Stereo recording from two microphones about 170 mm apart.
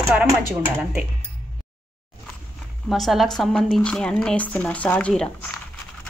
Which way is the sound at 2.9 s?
Centre (ahead or behind).